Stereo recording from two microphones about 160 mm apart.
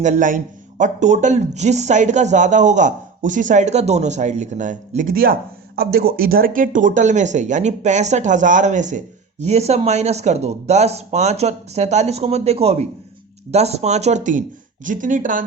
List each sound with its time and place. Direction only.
0.0 s speech: 50° right (ahead or behind)